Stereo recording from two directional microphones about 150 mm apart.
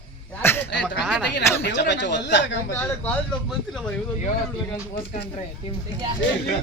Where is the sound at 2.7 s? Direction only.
10° left (ahead or behind).